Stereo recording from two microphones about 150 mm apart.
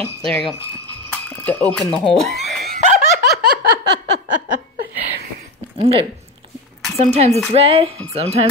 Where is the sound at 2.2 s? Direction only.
Centre (ahead or behind).